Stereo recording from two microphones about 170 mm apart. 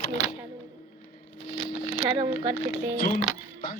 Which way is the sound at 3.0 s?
55° left (ahead or behind).